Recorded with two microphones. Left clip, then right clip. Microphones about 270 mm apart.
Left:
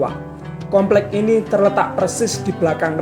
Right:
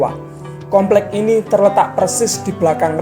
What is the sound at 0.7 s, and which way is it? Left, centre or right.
Speech, right.